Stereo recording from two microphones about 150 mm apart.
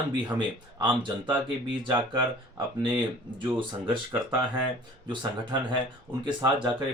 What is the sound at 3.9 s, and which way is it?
Speech, 35° right (ahead or behind).